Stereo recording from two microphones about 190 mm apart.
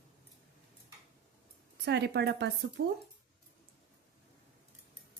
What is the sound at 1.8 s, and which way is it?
Speech, 60° right (ahead or behind).